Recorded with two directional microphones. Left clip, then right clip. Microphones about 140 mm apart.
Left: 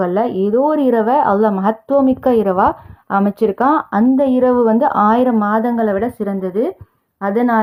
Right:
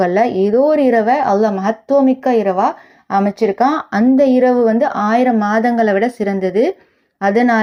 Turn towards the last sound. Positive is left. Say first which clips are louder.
# right 3 dB
turn(degrees=-5)  # may be behind; listen again after turning